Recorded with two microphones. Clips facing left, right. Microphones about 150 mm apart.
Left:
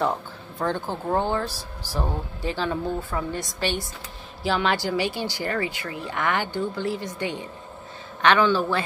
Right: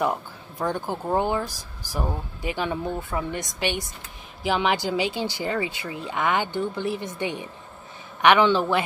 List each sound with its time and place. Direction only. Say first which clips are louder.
0.0 s speech: even; 15° right (ahead or behind)